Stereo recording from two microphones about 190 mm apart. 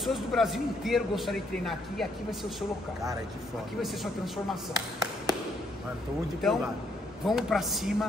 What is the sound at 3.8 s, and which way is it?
Speech, centre (ahead or behind).